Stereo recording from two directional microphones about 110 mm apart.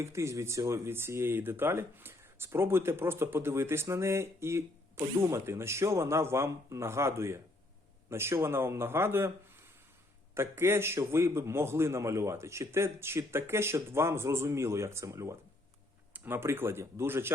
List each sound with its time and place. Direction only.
0.0 s speech: 25° right (ahead or behind)